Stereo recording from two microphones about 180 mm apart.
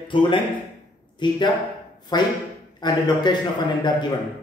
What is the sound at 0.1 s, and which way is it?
Speech, 30° left (ahead or behind).